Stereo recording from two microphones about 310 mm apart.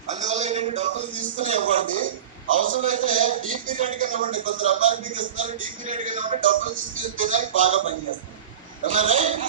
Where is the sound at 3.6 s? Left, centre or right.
Right.